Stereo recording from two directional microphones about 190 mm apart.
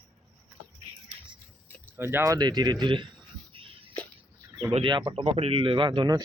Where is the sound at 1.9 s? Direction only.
10° right (ahead or behind).